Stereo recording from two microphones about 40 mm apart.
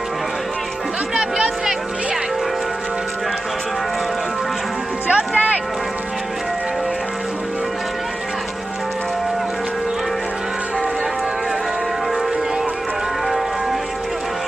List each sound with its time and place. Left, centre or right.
1.1 s music: centre
5.0 s music: right
13.2 s music: centre